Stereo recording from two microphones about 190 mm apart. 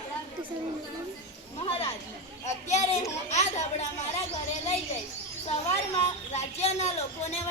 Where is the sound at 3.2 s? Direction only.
35° left (ahead or behind).